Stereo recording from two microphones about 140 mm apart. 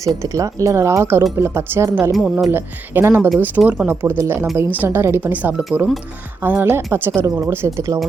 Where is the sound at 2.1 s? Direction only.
Centre (ahead or behind).